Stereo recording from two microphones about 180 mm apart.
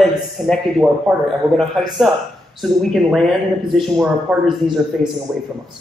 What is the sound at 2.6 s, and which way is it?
A man's voice, centre (ahead or behind).